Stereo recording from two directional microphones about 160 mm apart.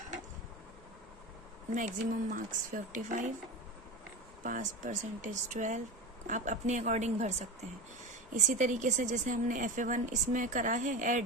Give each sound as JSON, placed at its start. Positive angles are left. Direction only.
{"t": 1.7, "sound": "speech", "side_deg": -55}
{"t": 4.4, "sound": "speech", "side_deg": -55}